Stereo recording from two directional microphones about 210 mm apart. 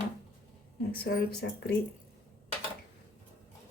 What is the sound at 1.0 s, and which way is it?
Speech, 50° left (ahead or behind).